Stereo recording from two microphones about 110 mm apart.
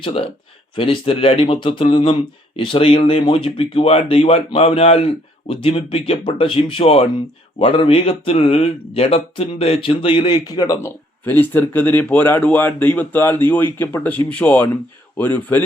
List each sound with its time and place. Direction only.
0.0 s speech: 55° left (ahead or behind); by 10.8 s 35° left (ahead or behind)
10.8 s speech: 20° left (ahead or behind)